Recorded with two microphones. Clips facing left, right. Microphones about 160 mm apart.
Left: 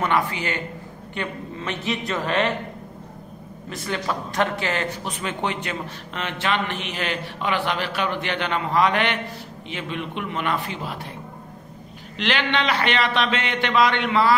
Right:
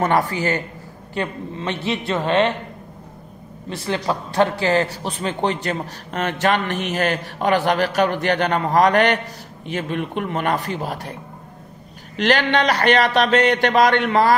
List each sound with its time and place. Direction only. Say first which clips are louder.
0.0 s a woman's voice: right 4 dB; 40° right (ahead or behind)
3.7 s a man's voice: right 4 dB; 30° right (ahead or behind)
12.2 s a man's voice: right 6 dB; 40° right (ahead or behind)